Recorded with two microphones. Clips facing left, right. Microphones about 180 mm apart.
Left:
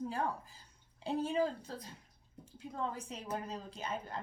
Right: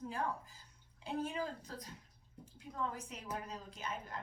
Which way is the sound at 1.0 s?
30° left (ahead or behind).